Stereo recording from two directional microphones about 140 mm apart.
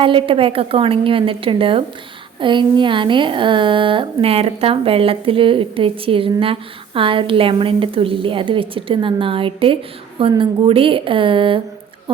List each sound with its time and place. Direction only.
0.0 s a woman's voice: 40° right (ahead or behind)